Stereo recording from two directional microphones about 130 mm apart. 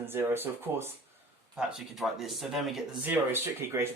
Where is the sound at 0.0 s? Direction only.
15° right (ahead or behind).